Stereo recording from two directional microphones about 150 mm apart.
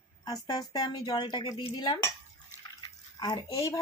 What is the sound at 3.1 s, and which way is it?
Speech, 25° left (ahead or behind).